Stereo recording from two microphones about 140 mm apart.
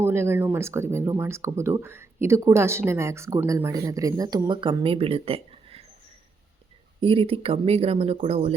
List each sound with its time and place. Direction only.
0.0 s speech: 15° right (ahead or behind); by 5.8 s 45° right (ahead or behind)
7.0 s speech: 40° right (ahead or behind)